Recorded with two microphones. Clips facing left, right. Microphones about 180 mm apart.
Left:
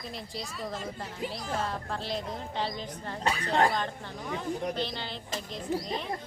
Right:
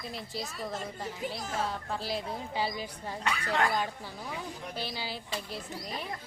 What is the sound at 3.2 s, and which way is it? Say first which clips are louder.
Speech: left 4 dB; 35° left (ahead or behind).